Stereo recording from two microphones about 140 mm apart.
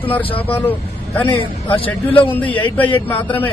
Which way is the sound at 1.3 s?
40° left (ahead or behind).